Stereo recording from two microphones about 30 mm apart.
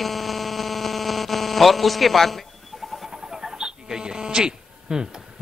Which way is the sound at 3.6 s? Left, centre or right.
Right.